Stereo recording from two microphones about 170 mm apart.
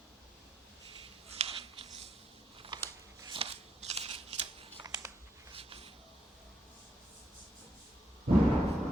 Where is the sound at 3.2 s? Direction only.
30° right (ahead or behind).